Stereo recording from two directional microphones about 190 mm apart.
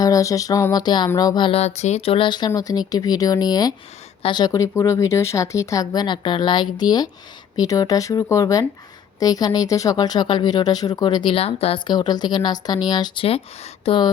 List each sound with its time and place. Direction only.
0.0 s speech: 15° left (ahead or behind)